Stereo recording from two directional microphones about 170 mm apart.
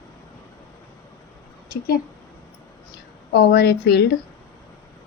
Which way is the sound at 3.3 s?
70° left (ahead or behind).